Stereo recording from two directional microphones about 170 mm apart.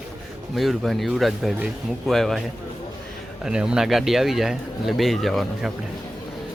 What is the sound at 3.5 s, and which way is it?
Speech, 5° right (ahead or behind).